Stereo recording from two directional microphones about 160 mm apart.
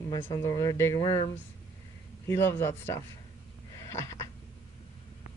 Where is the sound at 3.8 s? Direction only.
20° left (ahead or behind).